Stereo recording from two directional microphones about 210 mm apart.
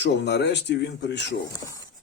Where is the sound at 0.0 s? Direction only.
55° left (ahead or behind).